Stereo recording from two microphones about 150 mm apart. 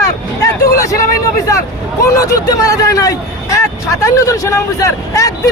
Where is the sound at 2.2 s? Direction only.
20° left (ahead or behind).